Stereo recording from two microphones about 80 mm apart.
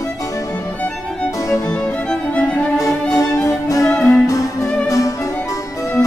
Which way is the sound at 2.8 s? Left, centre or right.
Left.